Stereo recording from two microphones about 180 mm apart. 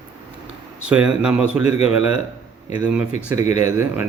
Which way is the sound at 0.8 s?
5° right (ahead or behind).